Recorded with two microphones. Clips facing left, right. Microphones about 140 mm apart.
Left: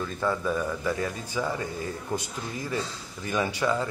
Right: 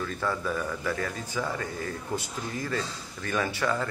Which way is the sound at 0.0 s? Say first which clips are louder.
Left 2 dB; 15° left (ahead or behind).